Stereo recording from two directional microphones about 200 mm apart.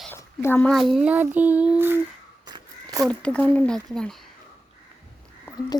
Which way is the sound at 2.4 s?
20° right (ahead or behind).